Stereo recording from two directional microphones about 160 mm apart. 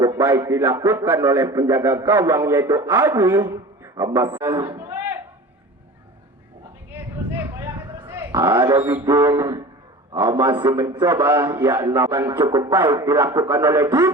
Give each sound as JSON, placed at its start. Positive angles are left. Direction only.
{"t": 0.0, "sound": "a man's voice", "side_deg": -20}
{"t": 4.7, "sound": "a sound", "side_deg": -15}
{"t": 7.6, "sound": "a sound", "side_deg": -20}
{"t": 8.4, "sound": "speech", "side_deg": -30}
{"t": 8.7, "sound": "a man's voice", "side_deg": -10}
{"t": 9.0, "sound": "speech", "side_deg": -20}